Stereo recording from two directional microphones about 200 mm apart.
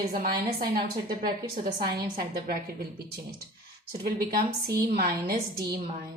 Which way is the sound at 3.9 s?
50° right (ahead or behind).